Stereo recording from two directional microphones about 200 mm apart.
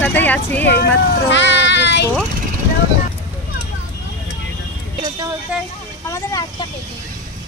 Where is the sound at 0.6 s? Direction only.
55° left (ahead or behind).